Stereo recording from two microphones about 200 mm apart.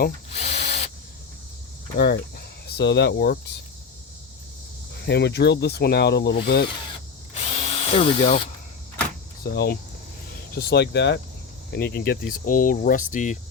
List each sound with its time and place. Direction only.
0.3 s drill: 30° left (ahead or behind)
2.0 s speech: 55° left (ahead or behind)
4.9 s speech: 60° left (ahead or behind)
7.6 s speech: 30° left (ahead or behind)
9.4 s speech: 50° left (ahead or behind)